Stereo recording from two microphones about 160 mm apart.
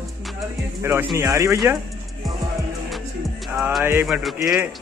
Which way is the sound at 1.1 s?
20° right (ahead or behind).